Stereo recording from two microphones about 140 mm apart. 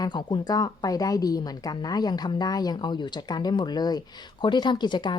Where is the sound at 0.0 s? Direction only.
30° left (ahead or behind).